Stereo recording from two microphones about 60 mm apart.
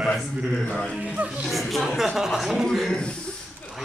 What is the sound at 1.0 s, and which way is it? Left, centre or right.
Speech, right.